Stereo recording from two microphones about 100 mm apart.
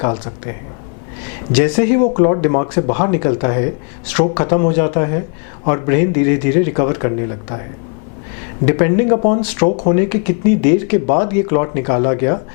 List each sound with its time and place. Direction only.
0.0 s speech: 15° left (ahead or behind)
1.5 s speech: 10° left (ahead or behind)
8.6 s speech: 15° left (ahead or behind)